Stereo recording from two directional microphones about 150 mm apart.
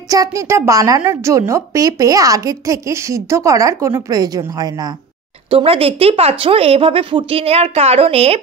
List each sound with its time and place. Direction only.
0.1 s a woman's voice: 20° right (ahead or behind)
5.5 s speech: 40° right (ahead or behind)